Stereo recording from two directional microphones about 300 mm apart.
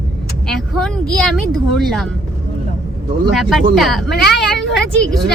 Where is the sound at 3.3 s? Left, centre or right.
Centre.